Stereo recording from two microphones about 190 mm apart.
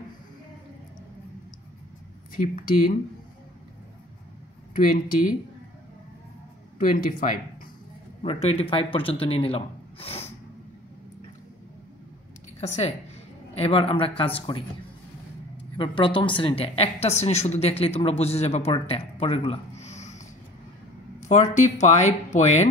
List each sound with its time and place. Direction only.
2.3 s speech: 45° left (ahead or behind)
4.7 s speech: 45° left (ahead or behind)
6.8 s speech: 45° left (ahead or behind)
8.2 s a woman's voice: 30° left (ahead or behind)
12.5 s a woman's voice: 35° left (ahead or behind)
15.8 s a woman's voice: 25° left (ahead or behind)
19.1 s a sound: 30° left (ahead or behind)
21.2 s a woman's voice: 40° left (ahead or behind)